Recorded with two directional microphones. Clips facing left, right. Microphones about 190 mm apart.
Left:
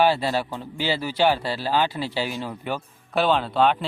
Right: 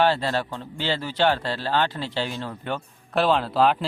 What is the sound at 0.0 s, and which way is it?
A man's voice, 10° left (ahead or behind).